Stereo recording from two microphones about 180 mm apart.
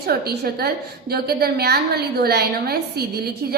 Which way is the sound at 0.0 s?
60° right (ahead or behind).